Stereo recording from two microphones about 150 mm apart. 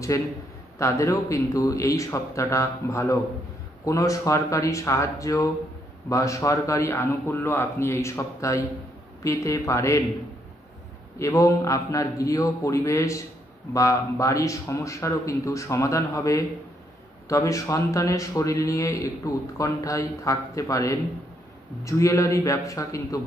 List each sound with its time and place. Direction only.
0.1 s speech: 20° left (ahead or behind)
11.1 s speech: 20° left (ahead or behind)